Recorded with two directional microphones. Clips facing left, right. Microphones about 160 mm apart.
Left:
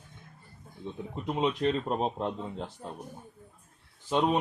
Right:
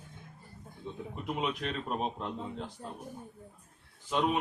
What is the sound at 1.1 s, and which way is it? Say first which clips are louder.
Speech: left 5 dB; 30° left (ahead or behind).